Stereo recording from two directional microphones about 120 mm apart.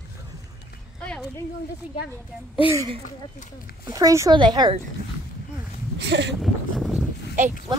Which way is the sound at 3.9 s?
25° right (ahead or behind).